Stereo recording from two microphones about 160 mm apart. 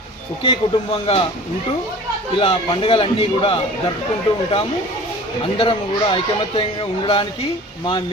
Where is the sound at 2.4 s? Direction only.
35° left (ahead or behind).